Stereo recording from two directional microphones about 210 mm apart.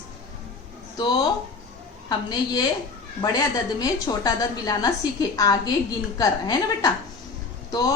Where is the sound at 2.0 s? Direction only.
20° left (ahead or behind).